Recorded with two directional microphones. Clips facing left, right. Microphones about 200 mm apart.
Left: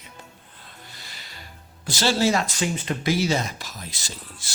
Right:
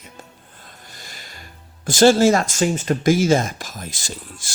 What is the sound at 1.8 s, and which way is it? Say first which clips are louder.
Speech: right 9 dB; 50° right (ahead or behind).